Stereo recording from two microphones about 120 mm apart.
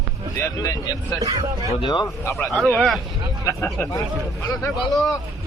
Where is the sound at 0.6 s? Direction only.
30° left (ahead or behind).